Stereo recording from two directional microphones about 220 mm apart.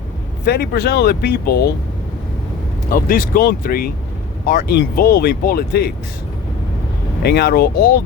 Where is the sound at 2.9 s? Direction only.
40° left (ahead or behind).